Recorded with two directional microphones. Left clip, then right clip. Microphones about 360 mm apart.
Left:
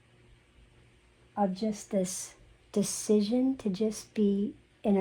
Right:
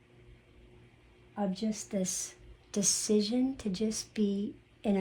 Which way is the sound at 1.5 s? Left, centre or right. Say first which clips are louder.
Left 4 dB; centre.